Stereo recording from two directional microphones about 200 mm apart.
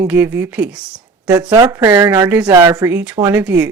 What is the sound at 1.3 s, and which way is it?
A woman's voice, 20° right (ahead or behind).